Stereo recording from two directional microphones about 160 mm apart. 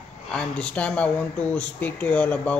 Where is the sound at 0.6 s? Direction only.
5° left (ahead or behind).